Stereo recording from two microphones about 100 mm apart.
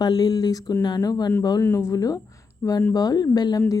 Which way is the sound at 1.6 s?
30° left (ahead or behind).